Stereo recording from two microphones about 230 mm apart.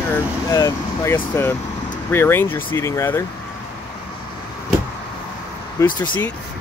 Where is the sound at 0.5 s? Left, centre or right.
Centre.